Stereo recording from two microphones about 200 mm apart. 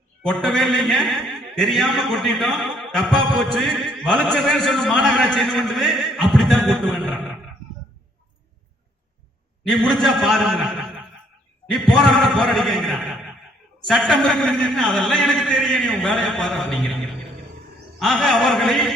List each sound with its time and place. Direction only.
0.2 s a man's voice: 5° left (ahead or behind)
9.6 s a man's voice: centre (ahead or behind)